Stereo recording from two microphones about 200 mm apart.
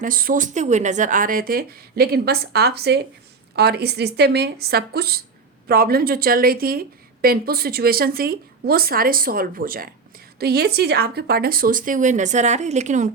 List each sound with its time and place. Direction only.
0.0 s a woman's voice: 45° right (ahead or behind)